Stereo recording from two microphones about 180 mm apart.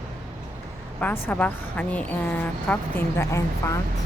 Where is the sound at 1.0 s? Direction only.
10° left (ahead or behind).